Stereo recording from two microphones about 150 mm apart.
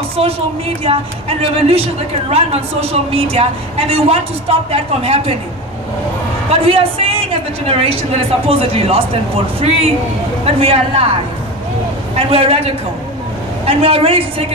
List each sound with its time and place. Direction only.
0.2 s a woman's voice: 40° right (ahead or behind)
1.5 s a woman's voice: 40° right (ahead or behind)
6.5 s a woman's voice: 40° right (ahead or behind)
12.2 s a woman's voice: 40° right (ahead or behind)